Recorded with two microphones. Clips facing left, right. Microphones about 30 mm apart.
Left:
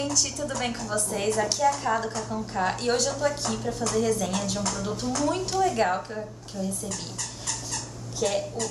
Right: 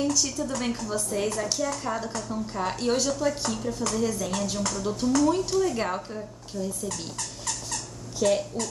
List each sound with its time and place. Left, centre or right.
0.1 s a woman's voice: centre
6.5 s speech: left
8.2 s speech: centre